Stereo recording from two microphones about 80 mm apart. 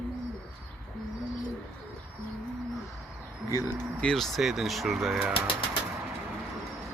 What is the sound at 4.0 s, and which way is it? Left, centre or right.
Speech, centre.